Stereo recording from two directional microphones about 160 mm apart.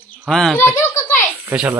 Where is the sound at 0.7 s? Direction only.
15° left (ahead or behind).